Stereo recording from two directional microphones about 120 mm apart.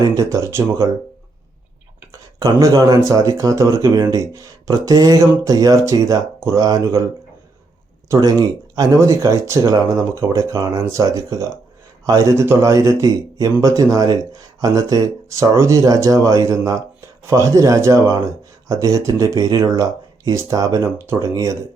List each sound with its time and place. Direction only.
0.2 s speech: 25° right (ahead or behind)
2.1 s speech: 30° right (ahead or behind)
8.1 s speech: 30° right (ahead or behind)